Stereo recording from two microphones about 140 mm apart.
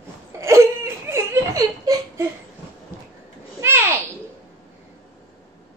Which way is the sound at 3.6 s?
20° right (ahead or behind).